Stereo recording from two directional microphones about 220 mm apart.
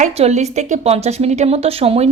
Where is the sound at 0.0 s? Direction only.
30° right (ahead or behind).